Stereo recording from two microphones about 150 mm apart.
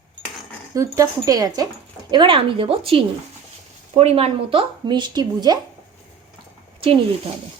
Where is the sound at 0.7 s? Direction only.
20° right (ahead or behind).